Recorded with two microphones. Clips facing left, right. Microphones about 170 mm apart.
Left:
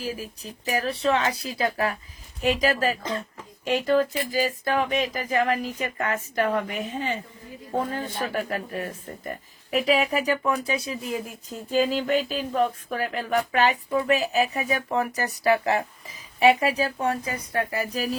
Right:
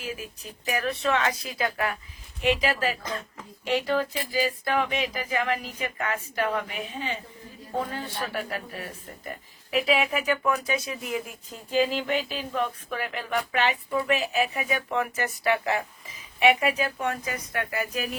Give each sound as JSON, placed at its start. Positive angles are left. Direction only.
{"t": 0.0, "sound": "speech", "side_deg": 35}
{"t": 3.6, "sound": "a sound", "side_deg": 45}
{"t": 9.7, "sound": "speech", "side_deg": 40}